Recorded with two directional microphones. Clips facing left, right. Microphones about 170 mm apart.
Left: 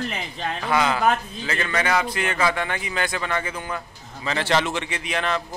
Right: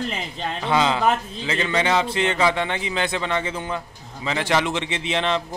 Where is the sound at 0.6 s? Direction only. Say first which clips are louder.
Right 1 dB; 20° right (ahead or behind).